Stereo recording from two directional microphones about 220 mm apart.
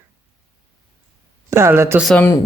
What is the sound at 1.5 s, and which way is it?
Speech, 10° right (ahead or behind).